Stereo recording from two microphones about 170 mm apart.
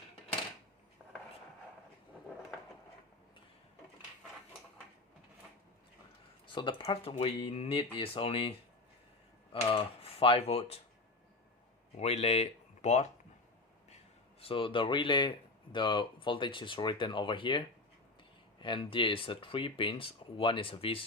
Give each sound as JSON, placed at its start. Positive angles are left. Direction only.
{"t": 6.5, "sound": "speech", "side_deg": 30}
{"t": 11.9, "sound": "speech", "side_deg": 40}
{"t": 14.4, "sound": "speech", "side_deg": 30}
{"t": 18.6, "sound": "speech", "side_deg": 30}